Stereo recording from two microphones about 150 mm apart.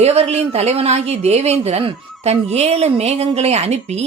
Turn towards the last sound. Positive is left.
turn(degrees=-45)  # may be behind; listen again after turning